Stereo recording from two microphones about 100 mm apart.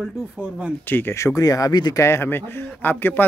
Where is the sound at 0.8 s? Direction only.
20° left (ahead or behind); by 1.9 s 45° left (ahead or behind).